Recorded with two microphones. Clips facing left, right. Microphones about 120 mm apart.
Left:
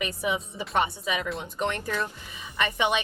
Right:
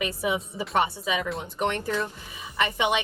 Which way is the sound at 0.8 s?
25° right (ahead or behind).